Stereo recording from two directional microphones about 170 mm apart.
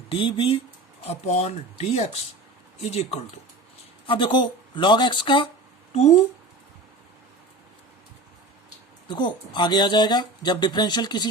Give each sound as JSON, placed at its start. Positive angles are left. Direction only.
{"t": 0.1, "sound": "speech", "side_deg": 30}
{"t": 5.9, "sound": "speech", "side_deg": 45}
{"t": 9.0, "sound": "speech", "side_deg": 25}